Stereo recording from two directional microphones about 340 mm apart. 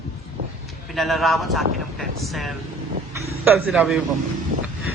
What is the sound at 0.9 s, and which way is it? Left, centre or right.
Speech, centre.